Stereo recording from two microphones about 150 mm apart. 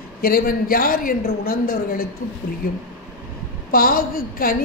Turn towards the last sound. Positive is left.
turn(degrees=75)  # may be behind; listen again after turning